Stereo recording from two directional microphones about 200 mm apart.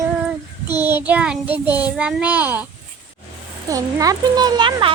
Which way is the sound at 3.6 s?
15° right (ahead or behind).